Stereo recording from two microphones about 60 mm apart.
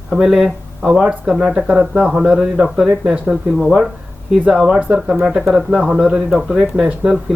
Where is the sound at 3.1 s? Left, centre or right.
Centre.